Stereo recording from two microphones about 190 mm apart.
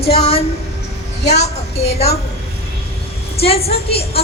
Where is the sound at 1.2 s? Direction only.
60° left (ahead or behind).